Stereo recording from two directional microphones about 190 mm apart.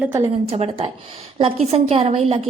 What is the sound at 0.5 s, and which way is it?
A woman's voice, 35° right (ahead or behind).